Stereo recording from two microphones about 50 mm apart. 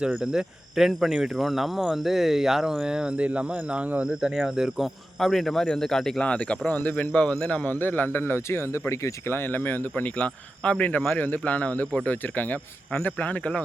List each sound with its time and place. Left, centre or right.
0.3 s speech: centre
3.2 s speech: right
4.2 s speech: centre
5.2 s speech: centre
6.2 s speech: left
7.6 s speech: left
8.9 s speech: left
9.3 s speech: left
9.9 s speech: left